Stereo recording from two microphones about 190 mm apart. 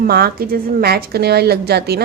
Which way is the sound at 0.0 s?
55° right (ahead or behind).